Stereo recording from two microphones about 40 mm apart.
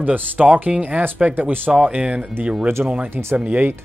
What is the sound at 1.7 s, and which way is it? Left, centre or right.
Speech, right.